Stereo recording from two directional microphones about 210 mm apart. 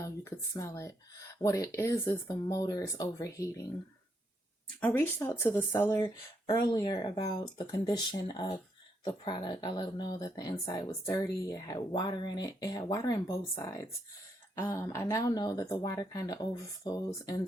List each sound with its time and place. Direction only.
0.0 s speech: 15° left (ahead or behind)
4.8 s speech: 10° left (ahead or behind)
6.5 s speech: 20° left (ahead or behind)